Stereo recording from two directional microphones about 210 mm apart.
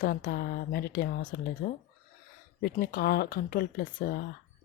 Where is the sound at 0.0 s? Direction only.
40° left (ahead or behind).